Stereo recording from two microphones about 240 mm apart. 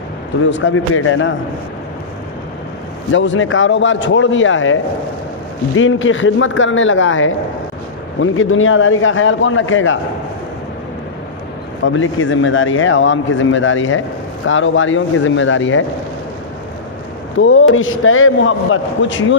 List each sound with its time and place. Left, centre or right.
0.5 s a man's voice: left
3.1 s a man's voice: left
11.8 s a man's voice: left
17.4 s a man's voice: left